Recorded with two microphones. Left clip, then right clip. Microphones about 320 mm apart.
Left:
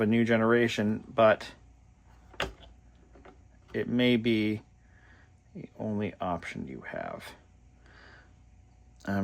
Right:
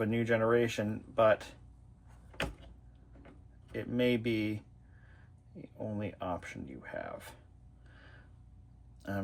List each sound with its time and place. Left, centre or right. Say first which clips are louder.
0.0 s speech: left 4 dB; left
3.7 s speech: left 5 dB; left
5.8 s speech: left 5 dB; left
9.0 s a sound: left 6 dB; left